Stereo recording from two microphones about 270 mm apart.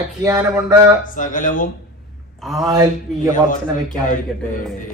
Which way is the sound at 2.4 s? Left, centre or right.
Centre.